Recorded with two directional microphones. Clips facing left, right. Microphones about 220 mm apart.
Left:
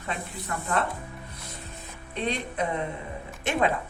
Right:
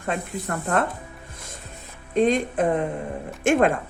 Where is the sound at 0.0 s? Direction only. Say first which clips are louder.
Right 7 dB; 50° right (ahead or behind).